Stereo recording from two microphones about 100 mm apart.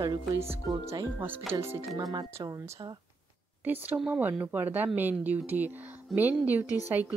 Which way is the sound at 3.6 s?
20° right (ahead or behind).